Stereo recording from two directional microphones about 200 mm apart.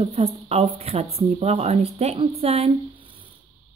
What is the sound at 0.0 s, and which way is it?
Speech, 30° right (ahead or behind).